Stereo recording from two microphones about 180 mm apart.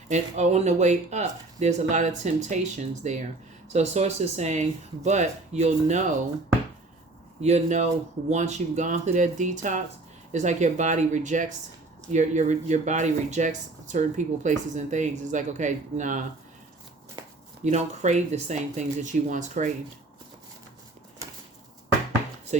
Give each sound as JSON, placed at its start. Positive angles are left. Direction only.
{"t": 0.1, "sound": "speech", "side_deg": -40}
{"t": 7.4, "sound": "speech", "side_deg": -40}
{"t": 17.2, "sound": "a sound", "side_deg": -20}
{"t": 17.6, "sound": "speech", "side_deg": -40}